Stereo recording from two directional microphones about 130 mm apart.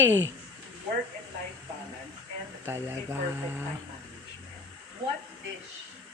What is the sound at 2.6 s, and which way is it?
Speech, 20° right (ahead or behind).